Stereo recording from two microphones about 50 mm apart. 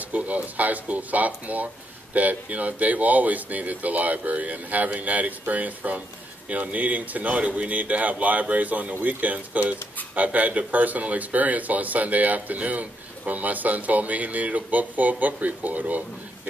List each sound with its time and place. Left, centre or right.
0.1 s speech: right